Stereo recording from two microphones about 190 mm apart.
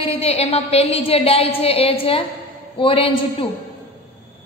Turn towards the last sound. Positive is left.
turn(degrees=30)  # may be behind; listen again after turning